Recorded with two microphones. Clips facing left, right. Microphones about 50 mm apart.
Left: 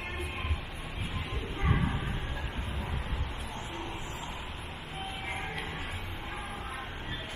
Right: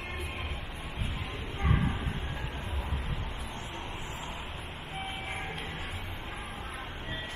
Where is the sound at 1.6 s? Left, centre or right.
Centre.